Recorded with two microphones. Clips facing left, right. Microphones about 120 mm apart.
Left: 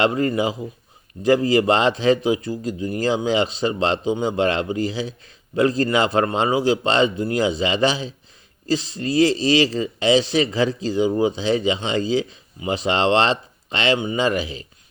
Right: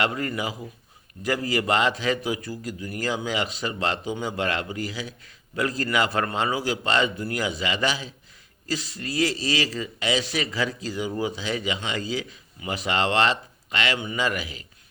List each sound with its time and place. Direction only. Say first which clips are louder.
0.0 s speech: left 7 dB; 25° left (ahead or behind)